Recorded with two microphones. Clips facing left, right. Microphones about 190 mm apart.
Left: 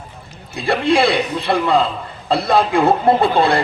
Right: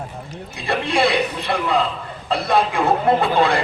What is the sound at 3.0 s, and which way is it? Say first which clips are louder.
Speech: left 3 dB; 35° left (ahead or behind).